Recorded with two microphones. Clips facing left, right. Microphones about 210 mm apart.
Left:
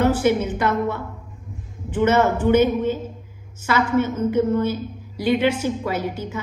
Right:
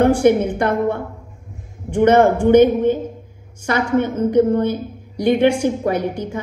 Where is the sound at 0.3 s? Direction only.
55° right (ahead or behind).